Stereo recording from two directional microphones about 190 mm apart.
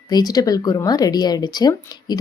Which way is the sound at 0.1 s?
20° left (ahead or behind).